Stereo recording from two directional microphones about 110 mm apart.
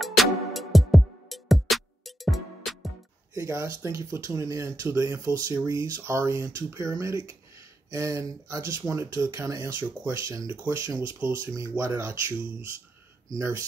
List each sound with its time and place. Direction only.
0.0 s music: centre (ahead or behind)
3.3 s speech: 25° right (ahead or behind)